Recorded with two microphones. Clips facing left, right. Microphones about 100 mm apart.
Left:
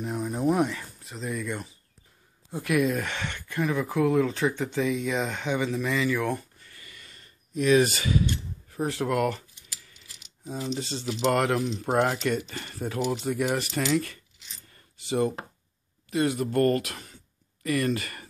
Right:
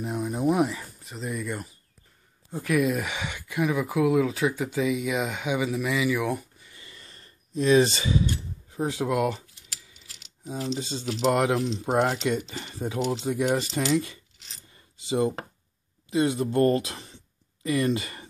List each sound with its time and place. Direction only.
0.0 s speech: 10° right (ahead or behind)
10.8 s speech: 15° right (ahead or behind)
14.7 s coin: 20° right (ahead or behind)
16.1 s speech: 20° right (ahead or behind)